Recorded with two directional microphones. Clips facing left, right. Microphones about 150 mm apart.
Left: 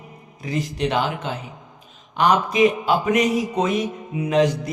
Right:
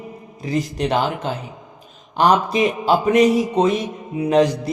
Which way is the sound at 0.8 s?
40° right (ahead or behind).